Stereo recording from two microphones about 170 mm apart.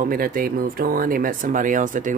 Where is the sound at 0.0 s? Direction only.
55° right (ahead or behind).